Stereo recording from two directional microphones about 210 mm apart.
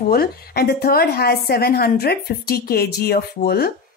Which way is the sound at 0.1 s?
45° left (ahead or behind).